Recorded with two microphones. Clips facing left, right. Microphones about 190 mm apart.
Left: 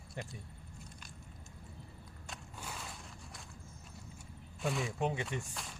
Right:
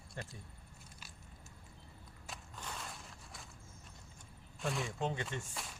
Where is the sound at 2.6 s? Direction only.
5° left (ahead or behind).